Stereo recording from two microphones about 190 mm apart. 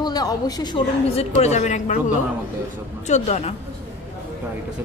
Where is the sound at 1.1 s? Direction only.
35° left (ahead or behind).